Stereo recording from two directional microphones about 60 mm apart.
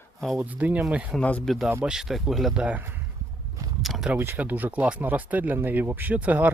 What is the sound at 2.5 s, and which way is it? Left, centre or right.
Speech, right.